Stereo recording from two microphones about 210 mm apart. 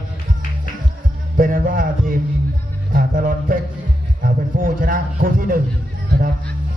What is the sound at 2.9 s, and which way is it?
Music, 40° right (ahead or behind).